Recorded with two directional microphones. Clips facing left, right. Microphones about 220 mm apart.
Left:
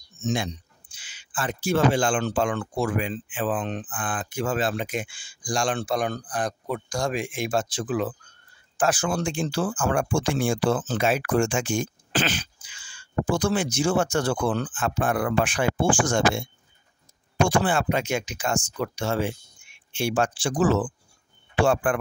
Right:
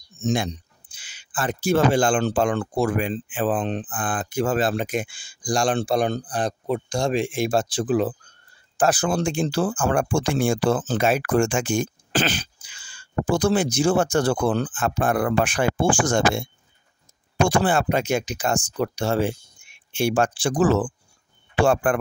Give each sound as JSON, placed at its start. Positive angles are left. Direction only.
{"t": 0.9, "sound": "speech", "side_deg": -40}
{"t": 17.5, "sound": "speech", "side_deg": -40}
{"t": 20.0, "sound": "speech", "side_deg": -45}